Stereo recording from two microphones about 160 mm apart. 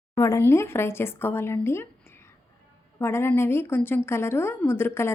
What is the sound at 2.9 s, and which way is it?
A woman's voice, 15° left (ahead or behind).